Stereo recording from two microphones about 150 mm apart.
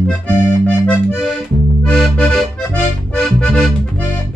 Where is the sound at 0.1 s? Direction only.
10° left (ahead or behind).